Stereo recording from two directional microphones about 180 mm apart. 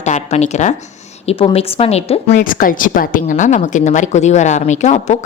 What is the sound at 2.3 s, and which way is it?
A woman's voice, 50° left (ahead or behind).